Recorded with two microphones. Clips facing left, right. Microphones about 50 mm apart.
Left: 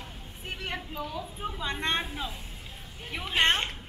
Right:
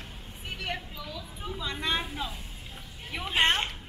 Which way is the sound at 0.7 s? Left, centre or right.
Left.